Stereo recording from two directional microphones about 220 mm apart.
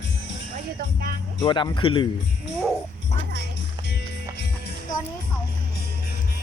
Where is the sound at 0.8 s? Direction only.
40° right (ahead or behind).